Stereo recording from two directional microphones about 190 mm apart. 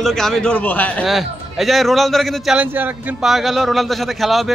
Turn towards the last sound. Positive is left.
turn(degrees=0)  # may be behind; listen again after turning